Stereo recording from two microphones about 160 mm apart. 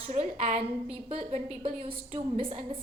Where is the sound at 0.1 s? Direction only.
45° right (ahead or behind).